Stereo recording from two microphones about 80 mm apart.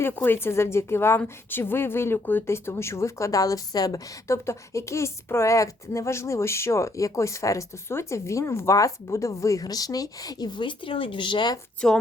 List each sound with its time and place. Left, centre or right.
0.0 s speech: left
4.3 s speech: left
11.8 s speech: centre